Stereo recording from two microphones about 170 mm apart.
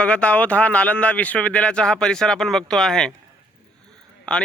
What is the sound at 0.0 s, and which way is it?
A man's voice, 5° left (ahead or behind).